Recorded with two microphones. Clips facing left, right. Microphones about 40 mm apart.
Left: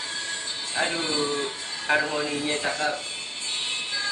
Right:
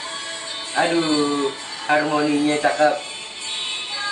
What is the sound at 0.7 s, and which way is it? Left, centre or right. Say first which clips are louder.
Speech: right 8 dB; right.